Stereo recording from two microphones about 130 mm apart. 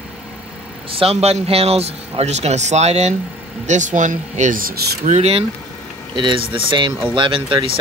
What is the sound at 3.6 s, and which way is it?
Speech, 70° right (ahead or behind).